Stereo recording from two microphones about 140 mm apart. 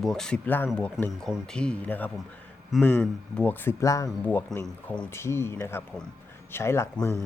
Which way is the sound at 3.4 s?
20° left (ahead or behind).